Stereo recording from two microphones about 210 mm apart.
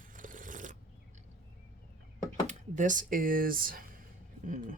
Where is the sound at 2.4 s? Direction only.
35° right (ahead or behind).